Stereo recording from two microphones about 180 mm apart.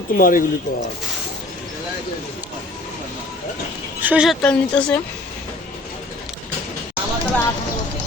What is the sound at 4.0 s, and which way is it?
Speech, 5° right (ahead or behind).